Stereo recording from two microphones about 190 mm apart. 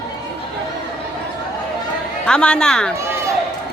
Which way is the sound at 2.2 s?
5° left (ahead or behind).